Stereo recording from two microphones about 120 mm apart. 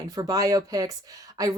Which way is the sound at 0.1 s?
30° right (ahead or behind).